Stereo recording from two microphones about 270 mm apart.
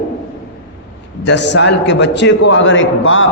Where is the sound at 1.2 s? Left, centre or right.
Left.